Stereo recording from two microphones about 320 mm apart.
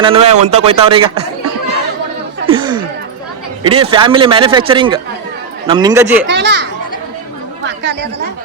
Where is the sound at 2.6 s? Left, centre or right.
Centre.